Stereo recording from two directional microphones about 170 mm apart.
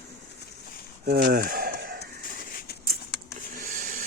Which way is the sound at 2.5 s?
60° left (ahead or behind).